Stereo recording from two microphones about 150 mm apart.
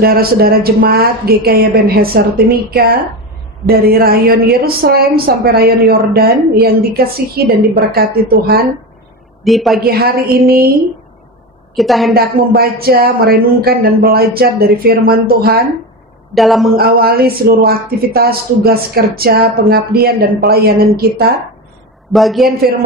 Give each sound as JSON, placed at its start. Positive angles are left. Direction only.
{"t": 0.0, "sound": "speech", "side_deg": -90}
{"t": 9.4, "sound": "a man's voice", "side_deg": 0}
{"t": 9.8, "sound": "speech", "side_deg": -90}
{"t": 11.7, "sound": "a man's voice", "side_deg": 0}
{"t": 12.1, "sound": "speech", "side_deg": -90}
{"t": 16.3, "sound": "a man's voice", "side_deg": 0}
{"t": 16.7, "sound": "speech", "side_deg": -90}
{"t": 22.1, "sound": "a man's voice", "side_deg": 0}